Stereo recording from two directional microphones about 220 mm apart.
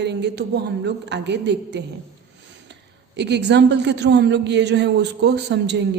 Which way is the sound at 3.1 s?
50° right (ahead or behind).